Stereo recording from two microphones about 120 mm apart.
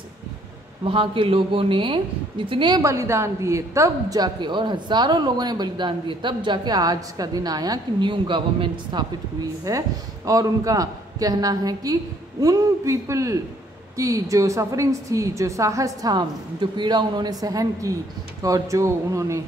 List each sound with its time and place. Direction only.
0.8 s speech: 45° right (ahead or behind)
2.8 s a woman's voice: 25° right (ahead or behind); by 9.0 s 45° right (ahead or behind)
9.7 s a woman's voice: 30° right (ahead or behind)